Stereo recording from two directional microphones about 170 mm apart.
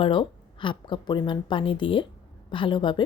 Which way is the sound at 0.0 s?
30° left (ahead or behind).